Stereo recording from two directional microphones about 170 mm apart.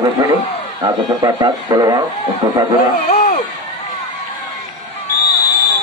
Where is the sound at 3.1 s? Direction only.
55° left (ahead or behind).